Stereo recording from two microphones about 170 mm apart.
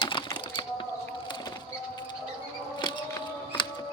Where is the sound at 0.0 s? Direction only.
30° left (ahead or behind).